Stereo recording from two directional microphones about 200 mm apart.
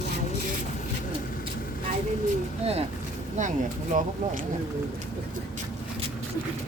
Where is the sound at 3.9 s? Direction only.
40° right (ahead or behind).